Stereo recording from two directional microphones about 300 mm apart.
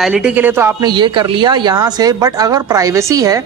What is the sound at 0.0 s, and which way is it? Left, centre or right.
A woman's voice, centre.